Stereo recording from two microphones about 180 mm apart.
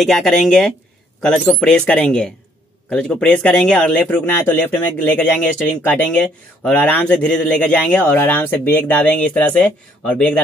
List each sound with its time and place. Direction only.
0.0 s speech: centre (ahead or behind)